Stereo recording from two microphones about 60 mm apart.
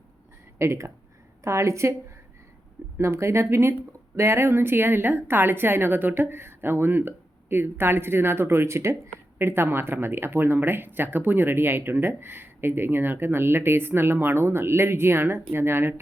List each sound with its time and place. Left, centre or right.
0.6 s a woman's voice: right
3.0 s a woman's voice: right